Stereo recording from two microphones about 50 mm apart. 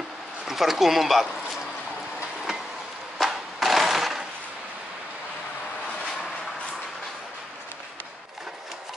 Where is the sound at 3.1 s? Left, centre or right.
Centre.